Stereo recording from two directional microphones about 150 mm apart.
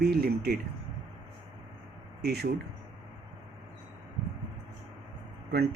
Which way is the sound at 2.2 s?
90° right.